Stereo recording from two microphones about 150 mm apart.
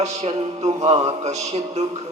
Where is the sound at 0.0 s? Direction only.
50° right (ahead or behind).